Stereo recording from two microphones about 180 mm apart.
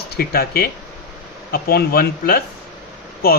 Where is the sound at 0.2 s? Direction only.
60° left (ahead or behind).